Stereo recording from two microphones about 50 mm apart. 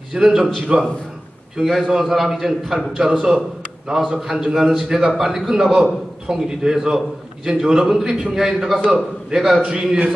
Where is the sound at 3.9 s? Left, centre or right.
Centre.